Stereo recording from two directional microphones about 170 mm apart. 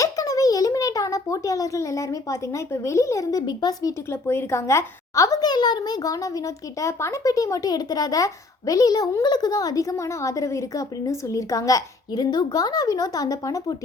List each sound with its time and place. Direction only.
0.0 s a child's voice: 20° left (ahead or behind)